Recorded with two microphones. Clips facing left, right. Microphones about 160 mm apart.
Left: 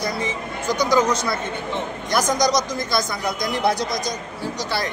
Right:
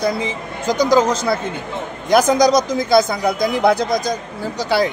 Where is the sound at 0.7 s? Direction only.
90° right.